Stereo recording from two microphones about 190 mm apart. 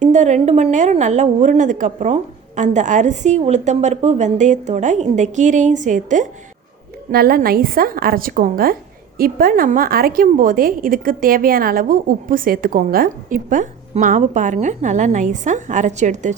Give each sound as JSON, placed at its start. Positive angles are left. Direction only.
{"t": 0.0, "sound": "a woman's voice", "side_deg": -40}
{"t": 7.1, "sound": "a woman's voice", "side_deg": -50}